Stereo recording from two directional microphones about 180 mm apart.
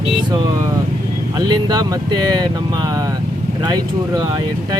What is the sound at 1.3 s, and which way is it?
Speech, 20° right (ahead or behind).